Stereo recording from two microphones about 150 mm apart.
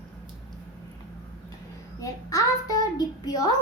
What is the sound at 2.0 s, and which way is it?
A woman's voice, 25° left (ahead or behind).